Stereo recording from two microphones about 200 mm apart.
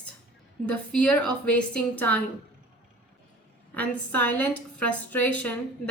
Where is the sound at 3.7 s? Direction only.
5° left (ahead or behind).